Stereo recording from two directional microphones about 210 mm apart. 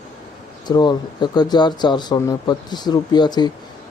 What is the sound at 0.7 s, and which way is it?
Speech, 20° left (ahead or behind).